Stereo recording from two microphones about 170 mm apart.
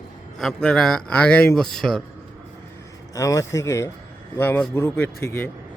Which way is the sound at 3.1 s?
20° left (ahead or behind).